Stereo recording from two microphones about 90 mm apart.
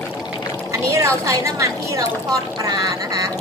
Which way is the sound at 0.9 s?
35° right (ahead or behind).